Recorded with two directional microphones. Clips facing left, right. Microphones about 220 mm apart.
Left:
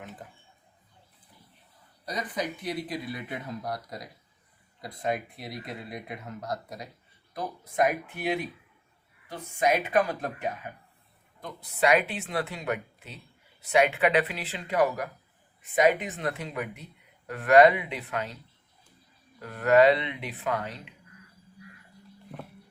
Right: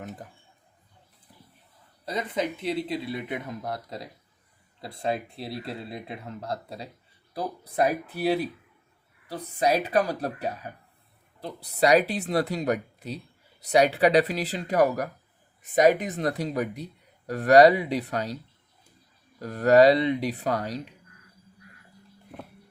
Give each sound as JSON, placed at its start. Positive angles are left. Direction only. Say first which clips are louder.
{"t": 2.0, "sound": "speech", "louder": "right 4 dB", "side_deg": -25}
{"t": 19.4, "sound": "speech", "louder": "right 3 dB", "side_deg": -35}